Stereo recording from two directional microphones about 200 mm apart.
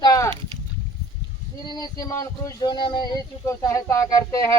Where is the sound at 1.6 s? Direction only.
20° left (ahead or behind).